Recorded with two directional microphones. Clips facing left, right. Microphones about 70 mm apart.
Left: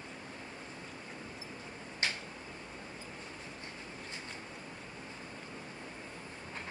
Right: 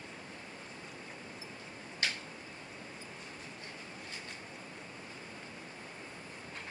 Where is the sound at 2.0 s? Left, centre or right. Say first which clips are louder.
Even; left.